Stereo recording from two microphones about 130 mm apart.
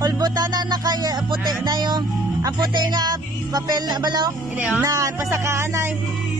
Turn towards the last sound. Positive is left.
turn(degrees=-20)  # may be behind; listen again after turning